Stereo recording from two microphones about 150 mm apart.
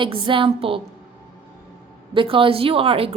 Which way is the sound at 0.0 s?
35° right (ahead or behind).